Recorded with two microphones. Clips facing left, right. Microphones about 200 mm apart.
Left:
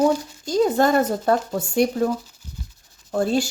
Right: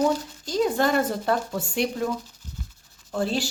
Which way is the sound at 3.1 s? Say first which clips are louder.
Left 5 dB; 45° left (ahead or behind).